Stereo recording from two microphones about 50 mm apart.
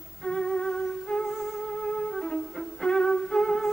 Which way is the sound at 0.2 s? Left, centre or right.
Centre.